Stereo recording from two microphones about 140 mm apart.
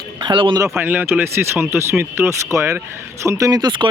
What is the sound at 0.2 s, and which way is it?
Speech, 35° right (ahead or behind).